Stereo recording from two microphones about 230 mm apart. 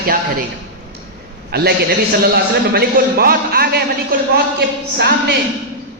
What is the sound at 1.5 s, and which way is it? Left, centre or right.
A man's voice, right.